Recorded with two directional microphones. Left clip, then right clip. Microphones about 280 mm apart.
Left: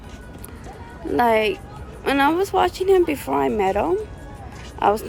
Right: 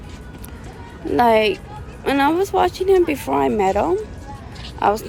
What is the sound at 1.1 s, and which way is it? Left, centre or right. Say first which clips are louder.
Speech: right 3 dB; centre.